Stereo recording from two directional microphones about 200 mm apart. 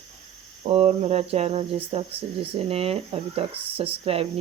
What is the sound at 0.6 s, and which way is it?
Speech, 35° right (ahead or behind).